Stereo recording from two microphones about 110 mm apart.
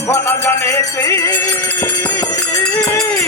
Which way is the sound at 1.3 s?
15° left (ahead or behind).